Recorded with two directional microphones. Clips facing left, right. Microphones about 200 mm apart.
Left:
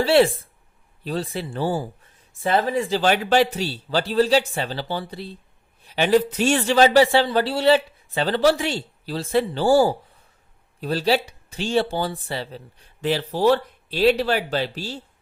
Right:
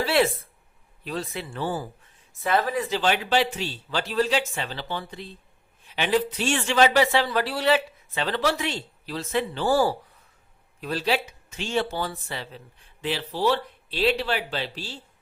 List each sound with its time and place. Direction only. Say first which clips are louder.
0.0 s speech: left 6 dB; 30° left (ahead or behind)
3.0 s speech: left 5 dB; 45° left (ahead or behind)